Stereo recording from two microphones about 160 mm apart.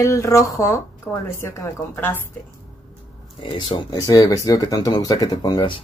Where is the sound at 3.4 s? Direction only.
30° left (ahead or behind).